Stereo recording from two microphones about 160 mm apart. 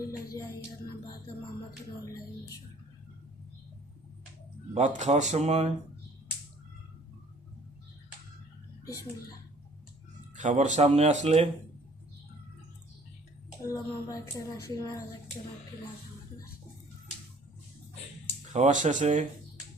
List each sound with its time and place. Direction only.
4.7 s speech: 45° right (ahead or behind)
10.3 s speech: 50° right (ahead or behind)
13.6 s a woman's voice: 20° left (ahead or behind)
18.5 s speech: 50° right (ahead or behind)